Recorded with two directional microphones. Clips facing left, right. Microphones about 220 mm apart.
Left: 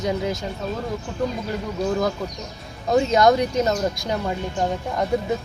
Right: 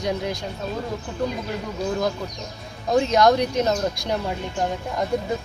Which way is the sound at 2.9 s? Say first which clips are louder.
Left 1 dB; centre (ahead or behind).